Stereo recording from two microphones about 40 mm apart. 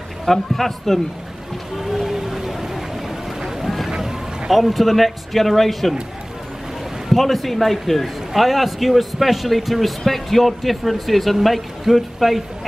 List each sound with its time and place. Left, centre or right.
0.2 s a man's voice: centre
1.8 s boat: centre
4.5 s a man's voice: centre
7.1 s a man's voice: centre